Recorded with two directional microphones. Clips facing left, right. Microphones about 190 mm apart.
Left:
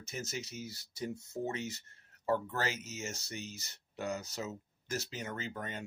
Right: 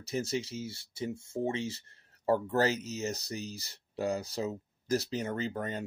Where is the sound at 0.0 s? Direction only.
35° right (ahead or behind).